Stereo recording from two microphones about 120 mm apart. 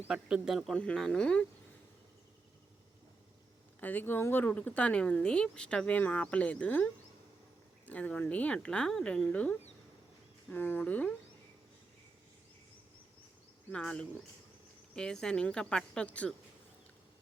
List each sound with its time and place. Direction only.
0.0 s speech: 10° right (ahead or behind); by 1.5 s 10° left (ahead or behind)
3.8 s speech: 15° left (ahead or behind)
13.7 s speech: 10° left (ahead or behind)